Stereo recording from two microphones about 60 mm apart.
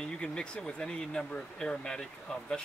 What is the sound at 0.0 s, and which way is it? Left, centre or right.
Speech, centre.